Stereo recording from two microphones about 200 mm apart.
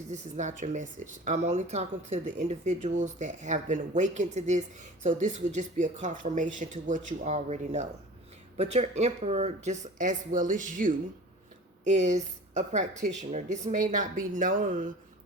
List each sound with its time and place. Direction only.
0.1 s speech: 35° right (ahead or behind)